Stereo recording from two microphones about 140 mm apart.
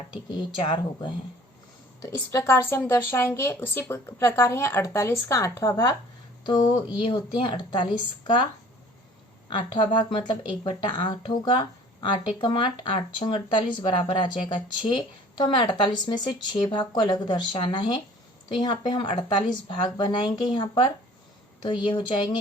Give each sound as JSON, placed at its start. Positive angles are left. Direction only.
{"t": 0.1, "sound": "speech", "side_deg": 35}
{"t": 2.0, "sound": "speech", "side_deg": 25}
{"t": 9.5, "sound": "speech", "side_deg": 35}